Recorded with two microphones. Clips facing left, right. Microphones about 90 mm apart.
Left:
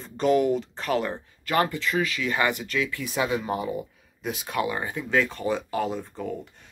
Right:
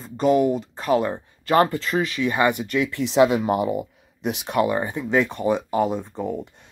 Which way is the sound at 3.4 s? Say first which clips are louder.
Right 7 dB; 60° right (ahead or behind).